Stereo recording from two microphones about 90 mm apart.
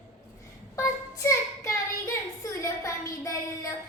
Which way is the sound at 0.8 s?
35° left (ahead or behind).